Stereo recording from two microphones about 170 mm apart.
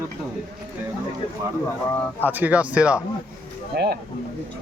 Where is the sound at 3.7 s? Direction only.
75° right (ahead or behind).